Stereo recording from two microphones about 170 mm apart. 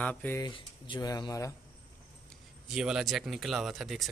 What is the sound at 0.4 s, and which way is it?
Speech, 30° left (ahead or behind).